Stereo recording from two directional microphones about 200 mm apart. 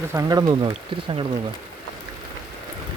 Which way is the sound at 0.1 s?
15° right (ahead or behind).